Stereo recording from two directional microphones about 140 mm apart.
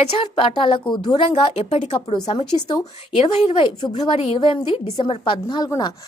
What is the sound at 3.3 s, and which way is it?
Speech, 40° left (ahead or behind).